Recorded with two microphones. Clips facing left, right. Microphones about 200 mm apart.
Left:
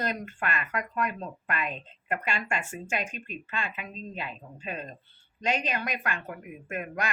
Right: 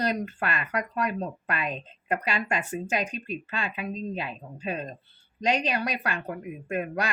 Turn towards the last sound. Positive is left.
turn(degrees=-35)  # may be behind; listen again after turning